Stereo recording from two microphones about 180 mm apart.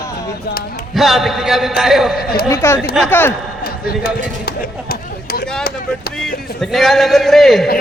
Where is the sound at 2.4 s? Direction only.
15° left (ahead or behind).